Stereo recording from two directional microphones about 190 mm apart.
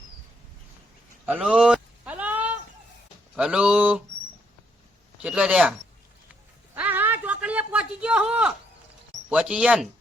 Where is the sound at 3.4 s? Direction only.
5° right (ahead or behind).